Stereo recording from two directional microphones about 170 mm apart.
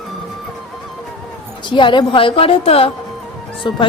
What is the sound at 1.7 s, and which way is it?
A woman's voice, 30° left (ahead or behind).